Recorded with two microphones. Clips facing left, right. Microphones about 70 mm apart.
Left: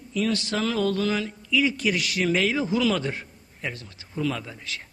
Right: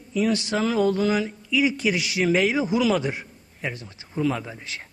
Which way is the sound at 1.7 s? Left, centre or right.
Centre.